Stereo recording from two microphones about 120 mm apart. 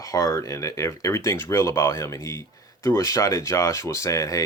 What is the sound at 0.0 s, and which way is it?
Speech, 30° left (ahead or behind).